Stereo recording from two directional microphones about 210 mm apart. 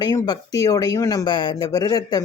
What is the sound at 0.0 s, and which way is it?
Speech, 20° left (ahead or behind).